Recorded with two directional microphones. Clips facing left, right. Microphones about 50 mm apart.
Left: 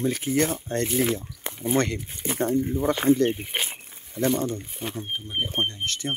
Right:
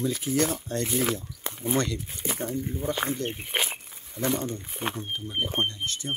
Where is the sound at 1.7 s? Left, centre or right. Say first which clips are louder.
Left 4 dB; left.